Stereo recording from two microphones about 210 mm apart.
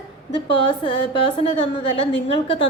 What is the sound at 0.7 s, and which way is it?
A woman's voice, 25° left (ahead or behind).